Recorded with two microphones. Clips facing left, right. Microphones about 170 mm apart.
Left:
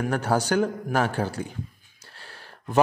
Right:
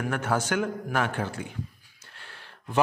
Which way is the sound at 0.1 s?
35° left (ahead or behind).